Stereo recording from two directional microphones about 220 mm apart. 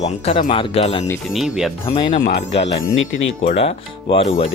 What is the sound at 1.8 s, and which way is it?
Speech, 25° left (ahead or behind).